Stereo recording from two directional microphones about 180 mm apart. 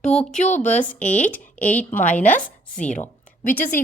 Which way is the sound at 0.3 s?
40° left (ahead or behind).